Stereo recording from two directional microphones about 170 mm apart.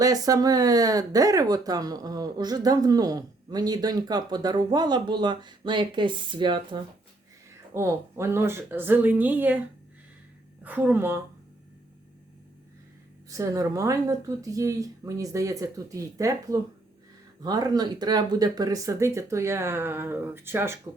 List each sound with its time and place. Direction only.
0.0 s speech: 20° right (ahead or behind)
7.7 s speech: 15° right (ahead or behind)
10.6 s speech: 10° right (ahead or behind)
13.3 s speech: 20° right (ahead or behind)